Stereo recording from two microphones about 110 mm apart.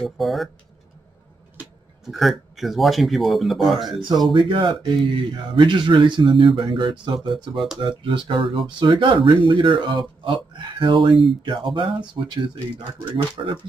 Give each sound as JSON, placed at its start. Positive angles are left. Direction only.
{"t": 0.0, "sound": "speech", "side_deg": 0}
{"t": 2.0, "sound": "speech", "side_deg": 0}
{"t": 4.3, "sound": "speech", "side_deg": -50}